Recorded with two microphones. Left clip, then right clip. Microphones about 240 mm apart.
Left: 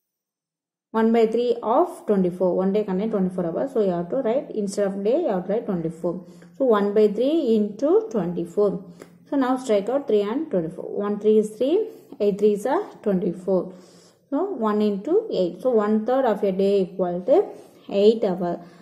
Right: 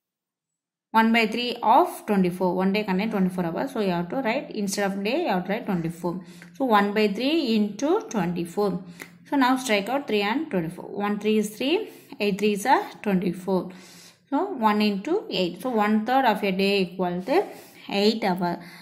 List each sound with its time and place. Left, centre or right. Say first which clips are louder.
1.0 s a woman's voice: left 4 dB; right
6.8 s a woman's voice: left 4 dB; right
14.7 s a woman's voice: left 4 dB; right